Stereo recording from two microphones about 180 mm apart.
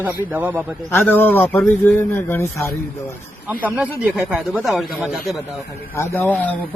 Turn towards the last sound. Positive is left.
turn(degrees=10)  # may be behind; listen again after turning